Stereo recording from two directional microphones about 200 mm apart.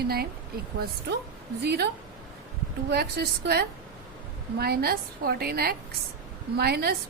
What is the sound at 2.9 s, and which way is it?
A woman's voice, 50° right (ahead or behind).